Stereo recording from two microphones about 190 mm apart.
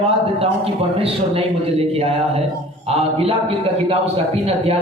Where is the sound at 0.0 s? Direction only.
30° right (ahead or behind).